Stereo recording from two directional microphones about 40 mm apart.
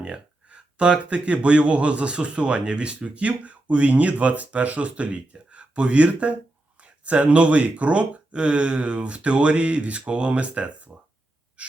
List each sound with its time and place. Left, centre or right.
0.0 s speech: right